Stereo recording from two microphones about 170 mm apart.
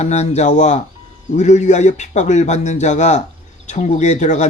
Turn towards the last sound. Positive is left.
turn(degrees=45)  # may be behind; listen again after turning